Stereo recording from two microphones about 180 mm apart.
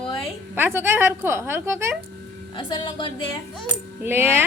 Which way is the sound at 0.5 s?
15° right (ahead or behind).